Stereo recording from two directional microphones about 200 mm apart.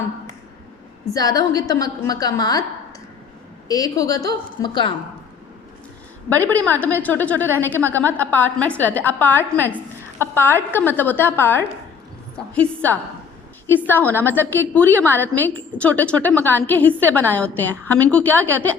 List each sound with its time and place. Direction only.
1.1 s a woman's voice: 20° left (ahead or behind)
3.7 s a woman's voice: 15° left (ahead or behind)
6.2 s a woman's voice: 10° left (ahead or behind)